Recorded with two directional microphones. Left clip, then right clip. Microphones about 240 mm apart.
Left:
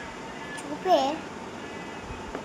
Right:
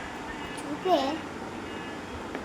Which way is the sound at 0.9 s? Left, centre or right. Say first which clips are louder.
Left 3 dB; centre.